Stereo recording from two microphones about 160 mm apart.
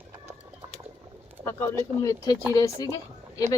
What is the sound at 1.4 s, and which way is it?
Speech, 20° left (ahead or behind).